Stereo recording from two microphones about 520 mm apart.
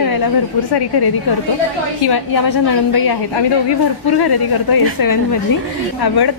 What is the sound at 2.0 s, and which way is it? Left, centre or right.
A woman's voice, left.